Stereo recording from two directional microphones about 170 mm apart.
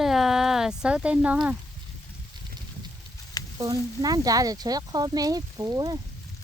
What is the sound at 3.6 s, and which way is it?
Speech, 20° right (ahead or behind).